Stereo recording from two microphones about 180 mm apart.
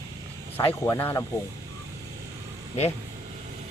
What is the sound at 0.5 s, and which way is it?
Speech, 10° left (ahead or behind).